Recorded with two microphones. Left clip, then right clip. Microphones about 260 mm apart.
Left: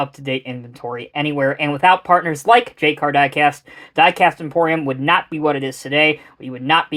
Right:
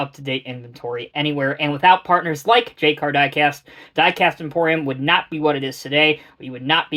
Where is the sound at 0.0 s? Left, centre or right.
Left.